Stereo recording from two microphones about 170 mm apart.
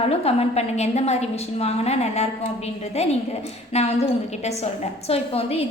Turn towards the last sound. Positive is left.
turn(degrees=35)  # may be behind; listen again after turning